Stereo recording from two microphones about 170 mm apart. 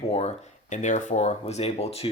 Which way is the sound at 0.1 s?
40° left (ahead or behind).